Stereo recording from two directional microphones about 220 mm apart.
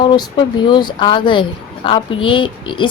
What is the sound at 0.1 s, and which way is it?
A woman's voice, 20° left (ahead or behind).